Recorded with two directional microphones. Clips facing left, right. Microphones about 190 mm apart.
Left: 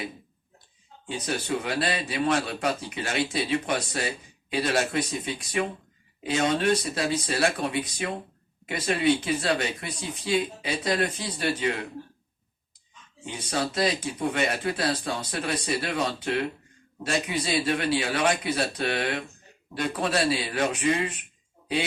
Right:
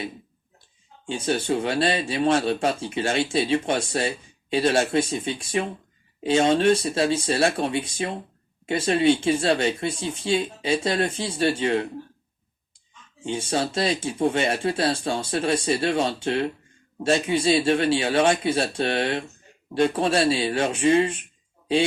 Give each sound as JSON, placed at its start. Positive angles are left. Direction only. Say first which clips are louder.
{"t": 1.0, "sound": "speech", "louder": "right 6 dB", "side_deg": -30}
{"t": 13.2, "sound": "speech", "louder": "right 4 dB", "side_deg": -25}